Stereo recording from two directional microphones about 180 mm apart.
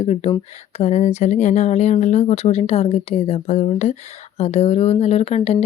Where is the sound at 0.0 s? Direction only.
30° left (ahead or behind).